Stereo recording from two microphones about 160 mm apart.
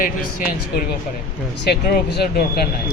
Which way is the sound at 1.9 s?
70° left (ahead or behind).